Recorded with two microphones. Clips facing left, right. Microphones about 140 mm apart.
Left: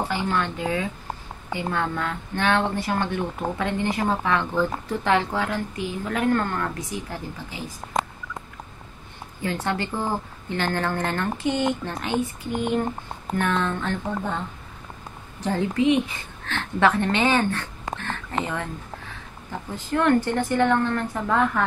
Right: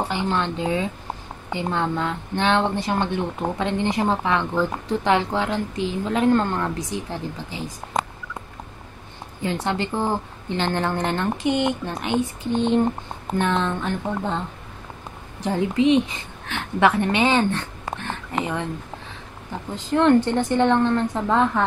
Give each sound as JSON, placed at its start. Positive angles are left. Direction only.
{"t": 0.1, "sound": "a woman's voice", "side_deg": -20}
{"t": 9.4, "sound": "a woman's voice", "side_deg": -20}
{"t": 15.4, "sound": "a woman's voice", "side_deg": -15}
{"t": 19.7, "sound": "a woman's voice", "side_deg": -20}